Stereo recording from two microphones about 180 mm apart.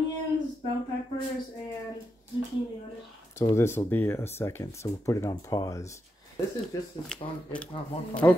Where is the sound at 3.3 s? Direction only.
15° left (ahead or behind).